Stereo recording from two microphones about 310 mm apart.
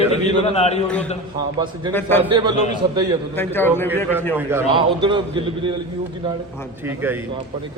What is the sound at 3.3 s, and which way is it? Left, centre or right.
Speech, centre.